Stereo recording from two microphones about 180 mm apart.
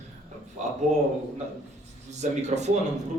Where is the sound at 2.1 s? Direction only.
40° right (ahead or behind).